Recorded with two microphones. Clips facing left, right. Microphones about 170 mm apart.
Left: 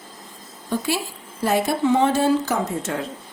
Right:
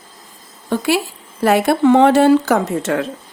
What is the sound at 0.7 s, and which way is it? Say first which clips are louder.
A woman's voice: right 7 dB; 75° right (ahead or behind).